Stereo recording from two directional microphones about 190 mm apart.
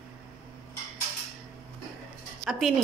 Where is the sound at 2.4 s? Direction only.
Centre (ahead or behind).